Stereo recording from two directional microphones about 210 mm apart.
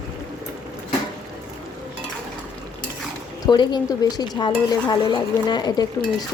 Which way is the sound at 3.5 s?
20° left (ahead or behind).